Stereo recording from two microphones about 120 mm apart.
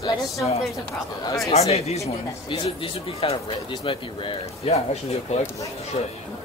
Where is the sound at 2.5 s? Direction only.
45° left (ahead or behind).